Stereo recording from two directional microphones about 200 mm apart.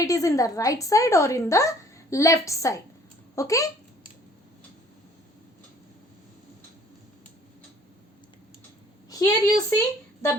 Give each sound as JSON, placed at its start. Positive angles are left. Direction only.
{"t": 0.0, "sound": "a woman's voice", "side_deg": 15}
{"t": 9.0, "sound": "a woman's voice", "side_deg": 15}